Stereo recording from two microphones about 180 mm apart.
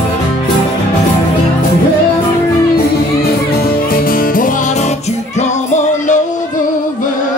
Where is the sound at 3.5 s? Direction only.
55° left (ahead or behind).